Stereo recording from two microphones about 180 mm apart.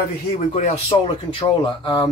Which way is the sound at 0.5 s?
35° left (ahead or behind).